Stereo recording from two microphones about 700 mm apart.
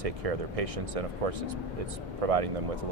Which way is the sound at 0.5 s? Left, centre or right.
Right.